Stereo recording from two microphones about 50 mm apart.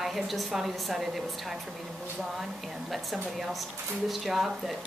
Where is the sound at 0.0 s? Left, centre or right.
Centre.